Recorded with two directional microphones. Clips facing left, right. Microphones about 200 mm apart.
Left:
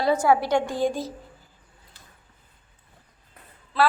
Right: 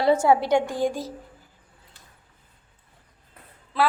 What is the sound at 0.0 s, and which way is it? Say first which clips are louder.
A woman's voice: right 2 dB; 25° right (ahead or behind).